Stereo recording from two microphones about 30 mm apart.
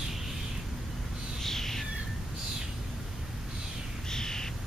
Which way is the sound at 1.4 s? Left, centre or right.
Centre.